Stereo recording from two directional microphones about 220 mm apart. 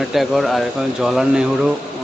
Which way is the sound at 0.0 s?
Centre (ahead or behind).